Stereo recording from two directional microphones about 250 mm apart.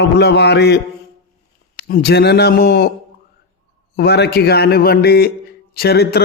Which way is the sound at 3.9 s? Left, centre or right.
Left.